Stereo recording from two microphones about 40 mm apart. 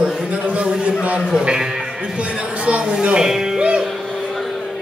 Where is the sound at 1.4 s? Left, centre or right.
Right.